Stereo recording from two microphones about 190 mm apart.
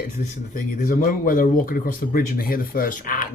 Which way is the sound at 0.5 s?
45° left (ahead or behind).